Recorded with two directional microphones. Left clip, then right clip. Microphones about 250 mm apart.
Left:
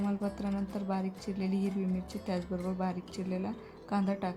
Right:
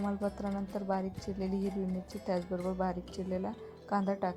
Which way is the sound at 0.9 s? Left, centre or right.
Centre.